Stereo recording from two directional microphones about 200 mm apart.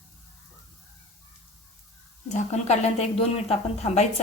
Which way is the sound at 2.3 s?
35° left (ahead or behind).